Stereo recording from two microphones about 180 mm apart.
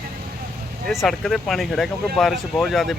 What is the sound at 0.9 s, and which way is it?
Speech, centre (ahead or behind).